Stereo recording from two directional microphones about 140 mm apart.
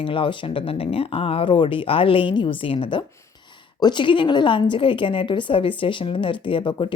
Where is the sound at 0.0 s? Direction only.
40° left (ahead or behind).